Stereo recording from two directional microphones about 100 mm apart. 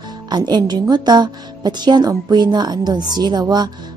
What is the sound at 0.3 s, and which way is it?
A woman's voice, 45° right (ahead or behind).